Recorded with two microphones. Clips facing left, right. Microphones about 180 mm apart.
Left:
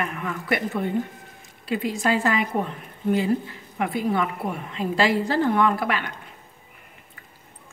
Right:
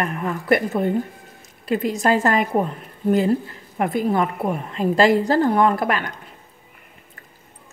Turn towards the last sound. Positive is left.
turn(degrees=-45)  # may be behind; listen again after turning